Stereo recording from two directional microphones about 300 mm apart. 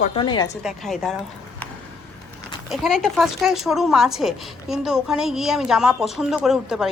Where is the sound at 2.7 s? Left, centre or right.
Centre.